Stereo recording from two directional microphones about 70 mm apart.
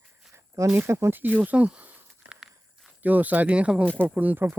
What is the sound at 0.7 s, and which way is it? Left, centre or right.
Speech, right.